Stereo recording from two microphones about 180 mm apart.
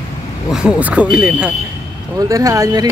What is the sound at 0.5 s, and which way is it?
Speech, 5° right (ahead or behind).